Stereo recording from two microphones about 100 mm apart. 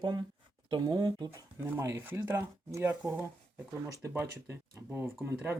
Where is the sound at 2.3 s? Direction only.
30° right (ahead or behind).